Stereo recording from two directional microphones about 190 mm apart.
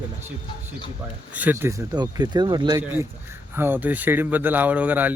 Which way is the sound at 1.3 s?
10° right (ahead or behind).